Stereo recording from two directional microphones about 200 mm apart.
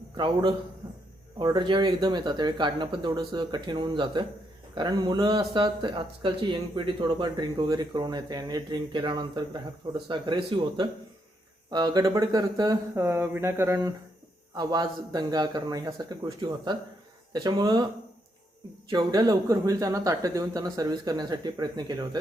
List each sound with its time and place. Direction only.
1.4 s speech: 25° right (ahead or behind)
18.9 s speech: 15° right (ahead or behind)